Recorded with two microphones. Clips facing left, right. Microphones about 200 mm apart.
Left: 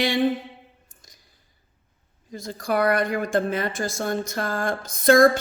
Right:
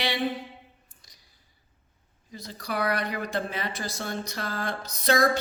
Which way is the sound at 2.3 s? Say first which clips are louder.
Left 8 dB; 45° left (ahead or behind).